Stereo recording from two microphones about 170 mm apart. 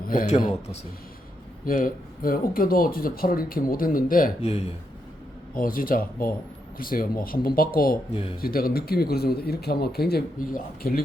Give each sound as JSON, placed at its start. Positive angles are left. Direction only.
{"t": 0.1, "sound": "speech", "side_deg": 55}
{"t": 1.6, "sound": "speech", "side_deg": 55}
{"t": 4.4, "sound": "speech", "side_deg": 40}
{"t": 5.5, "sound": "speech", "side_deg": 55}